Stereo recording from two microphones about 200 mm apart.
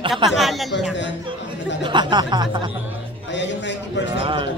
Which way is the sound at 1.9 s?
25° right (ahead or behind).